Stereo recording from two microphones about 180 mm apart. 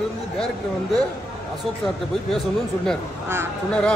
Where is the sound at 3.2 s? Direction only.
15° right (ahead or behind).